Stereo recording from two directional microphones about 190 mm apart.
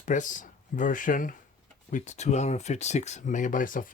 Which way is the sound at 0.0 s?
40° left (ahead or behind).